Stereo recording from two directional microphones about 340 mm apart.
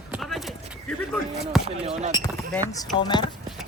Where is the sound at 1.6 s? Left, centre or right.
Centre.